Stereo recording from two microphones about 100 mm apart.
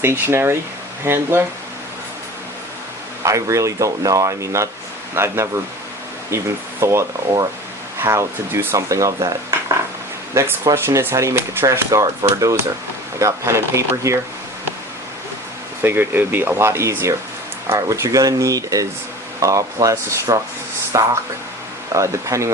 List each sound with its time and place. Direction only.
0.0 s speech: 25° right (ahead or behind)
3.2 s speech: 30° right (ahead or behind)
15.8 s speech: 20° right (ahead or behind)